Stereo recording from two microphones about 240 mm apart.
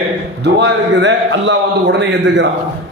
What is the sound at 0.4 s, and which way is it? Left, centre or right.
A man's voice, right.